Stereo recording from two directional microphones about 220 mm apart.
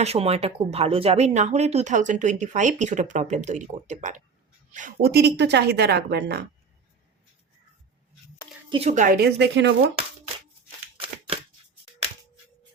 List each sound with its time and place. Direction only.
0.0 s speech: 30° right (ahead or behind); by 6.4 s 50° right (ahead or behind)
8.7 s speech: 30° right (ahead or behind); by 9.7 s 50° right (ahead or behind)